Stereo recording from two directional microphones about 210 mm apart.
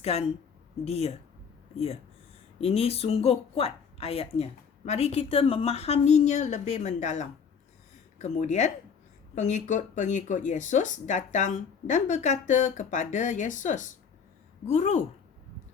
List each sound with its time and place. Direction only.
0.0 s a woman's voice: 30° left (ahead or behind)